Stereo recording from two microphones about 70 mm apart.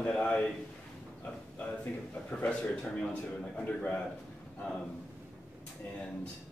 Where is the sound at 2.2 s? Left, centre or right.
Centre.